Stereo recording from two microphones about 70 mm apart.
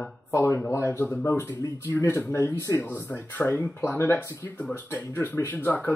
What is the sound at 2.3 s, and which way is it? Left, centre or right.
Speech, left.